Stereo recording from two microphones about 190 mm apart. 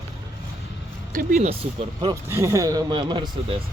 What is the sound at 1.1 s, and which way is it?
Speech, 40° right (ahead or behind).